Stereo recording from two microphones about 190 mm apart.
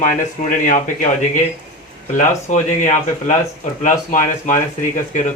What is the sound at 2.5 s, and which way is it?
Speech, 40° left (ahead or behind).